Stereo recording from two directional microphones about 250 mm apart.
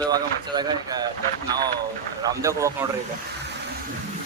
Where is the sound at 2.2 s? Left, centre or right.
Centre.